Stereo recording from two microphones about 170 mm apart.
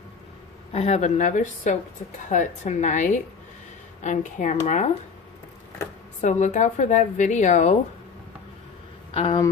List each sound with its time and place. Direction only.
0.7 s a woman's voice: 40° left (ahead or behind)
6.2 s a woman's voice: 45° left (ahead or behind)
9.1 s speech: 30° left (ahead or behind)